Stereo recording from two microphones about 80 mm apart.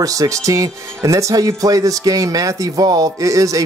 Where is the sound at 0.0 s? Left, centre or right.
Right.